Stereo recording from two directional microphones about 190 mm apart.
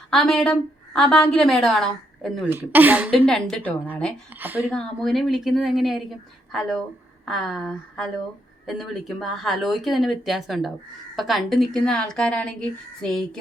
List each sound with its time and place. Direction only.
0.1 s a woman's voice: centre (ahead or behind)
3.2 s a woman's voice: 5° left (ahead or behind)
4.4 s speech: 10° right (ahead or behind)
4.7 s a woman's voice: centre (ahead or behind)